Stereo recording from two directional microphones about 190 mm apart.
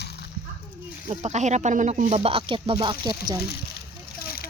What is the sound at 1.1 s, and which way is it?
Speech, 35° right (ahead or behind).